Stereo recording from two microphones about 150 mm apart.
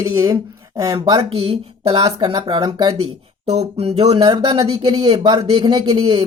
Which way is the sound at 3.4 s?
45° right (ahead or behind).